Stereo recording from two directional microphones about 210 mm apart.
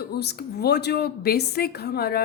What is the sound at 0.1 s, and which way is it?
A woman's voice, 50° left (ahead or behind).